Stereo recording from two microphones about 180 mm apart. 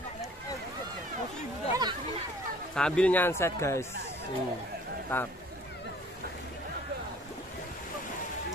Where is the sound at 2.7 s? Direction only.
5° left (ahead or behind).